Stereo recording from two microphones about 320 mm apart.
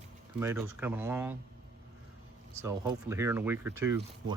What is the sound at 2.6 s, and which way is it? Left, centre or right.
Speech, centre.